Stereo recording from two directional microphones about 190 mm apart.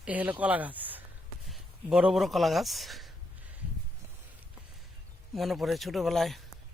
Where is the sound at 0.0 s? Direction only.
10° right (ahead or behind).